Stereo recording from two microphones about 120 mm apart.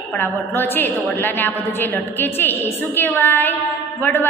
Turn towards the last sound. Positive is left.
turn(degrees=15)  # may be behind; listen again after turning